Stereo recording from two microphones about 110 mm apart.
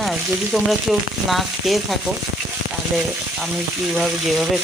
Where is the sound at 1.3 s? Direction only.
Centre (ahead or behind).